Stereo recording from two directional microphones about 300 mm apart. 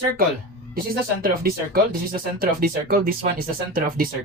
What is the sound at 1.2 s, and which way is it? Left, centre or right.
Speech, right.